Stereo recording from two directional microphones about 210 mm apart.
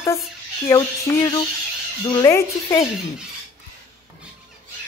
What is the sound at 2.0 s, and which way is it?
Speech, 20° left (ahead or behind).